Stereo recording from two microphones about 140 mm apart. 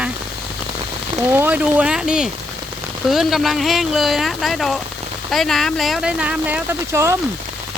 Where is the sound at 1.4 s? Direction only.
10° right (ahead or behind).